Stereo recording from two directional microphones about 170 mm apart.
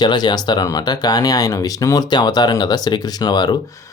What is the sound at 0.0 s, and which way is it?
Speech, 25° left (ahead or behind).